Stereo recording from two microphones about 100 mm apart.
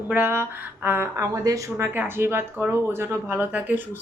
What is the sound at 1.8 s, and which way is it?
Speech, 20° right (ahead or behind).